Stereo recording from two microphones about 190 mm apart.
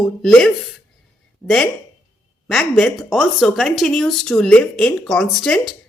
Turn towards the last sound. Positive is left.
turn(degrees=0)  # may be behind; listen again after turning